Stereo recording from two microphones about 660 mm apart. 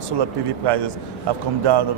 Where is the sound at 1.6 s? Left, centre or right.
Right.